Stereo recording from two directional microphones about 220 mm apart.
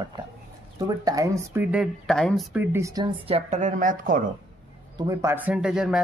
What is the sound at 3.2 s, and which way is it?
A woman's voice, 30° right (ahead or behind).